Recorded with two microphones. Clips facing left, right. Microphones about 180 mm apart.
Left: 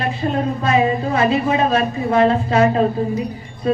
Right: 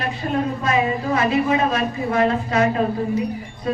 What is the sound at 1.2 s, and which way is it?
A man's voice, 30° left (ahead or behind).